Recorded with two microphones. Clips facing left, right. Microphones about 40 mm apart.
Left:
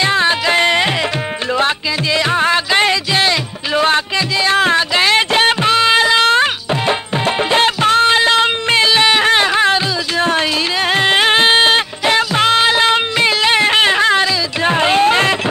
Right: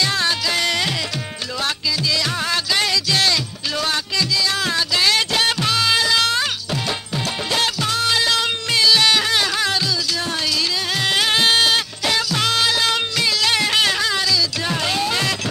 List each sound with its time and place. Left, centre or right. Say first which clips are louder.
0.0 s music: left 7 dB; left
2.1 s music: left 8 dB; left